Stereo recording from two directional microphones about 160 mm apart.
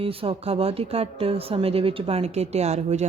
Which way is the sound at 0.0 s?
35° right (ahead or behind).